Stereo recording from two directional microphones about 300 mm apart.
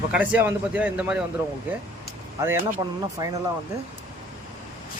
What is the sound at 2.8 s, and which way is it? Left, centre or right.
Speech, centre.